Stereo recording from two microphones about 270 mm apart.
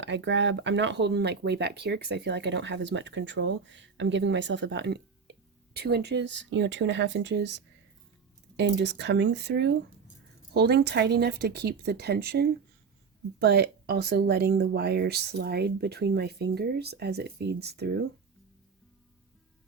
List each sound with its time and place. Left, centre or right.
0.0 s speech: right